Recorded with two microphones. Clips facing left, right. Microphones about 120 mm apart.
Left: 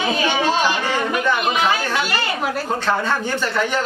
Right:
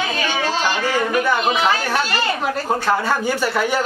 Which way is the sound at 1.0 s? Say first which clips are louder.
Right 2 dB; 10° right (ahead or behind).